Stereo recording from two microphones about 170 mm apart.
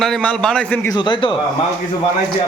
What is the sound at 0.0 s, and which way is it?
Speech, 5° left (ahead or behind).